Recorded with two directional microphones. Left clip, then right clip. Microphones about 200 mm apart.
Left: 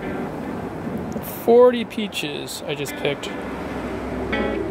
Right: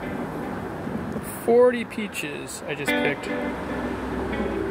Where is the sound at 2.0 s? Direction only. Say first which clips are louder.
Left 4 dB; 75° left (ahead or behind).